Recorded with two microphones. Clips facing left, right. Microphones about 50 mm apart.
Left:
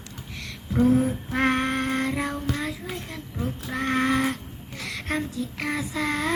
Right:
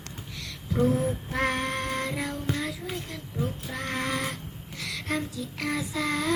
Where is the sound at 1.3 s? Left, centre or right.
Left.